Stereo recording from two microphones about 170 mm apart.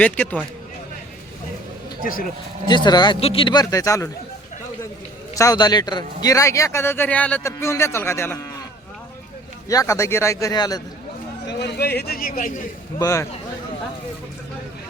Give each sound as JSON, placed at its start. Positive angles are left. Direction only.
{"t": 0.0, "sound": "a man's voice", "side_deg": 10}
{"t": 2.6, "sound": "a man's voice", "side_deg": 25}
{"t": 5.3, "sound": "a man's voice", "side_deg": 20}
{"t": 9.6, "sound": "a man's voice", "side_deg": 20}
{"t": 11.4, "sound": "a man's voice", "side_deg": 85}
{"t": 13.0, "sound": "a man's voice", "side_deg": 20}